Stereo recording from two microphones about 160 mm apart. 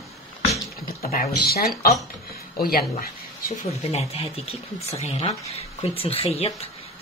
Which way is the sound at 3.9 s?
40° left (ahead or behind).